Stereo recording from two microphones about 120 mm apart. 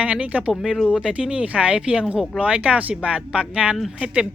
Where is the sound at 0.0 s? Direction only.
10° right (ahead or behind).